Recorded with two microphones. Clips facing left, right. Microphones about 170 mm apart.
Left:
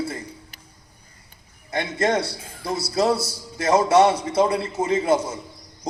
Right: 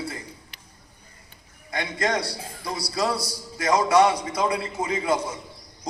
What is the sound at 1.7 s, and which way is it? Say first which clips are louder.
A man's voice: left 4 dB; 25° left (ahead or behind).